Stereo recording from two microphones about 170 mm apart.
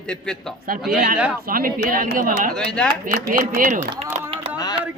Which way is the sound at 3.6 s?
50° right (ahead or behind).